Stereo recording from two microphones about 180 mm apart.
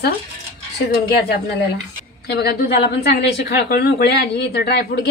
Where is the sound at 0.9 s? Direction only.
60° left (ahead or behind).